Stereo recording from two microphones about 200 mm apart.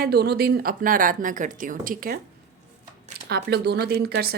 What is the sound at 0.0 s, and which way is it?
A woman's voice, 50° right (ahead or behind).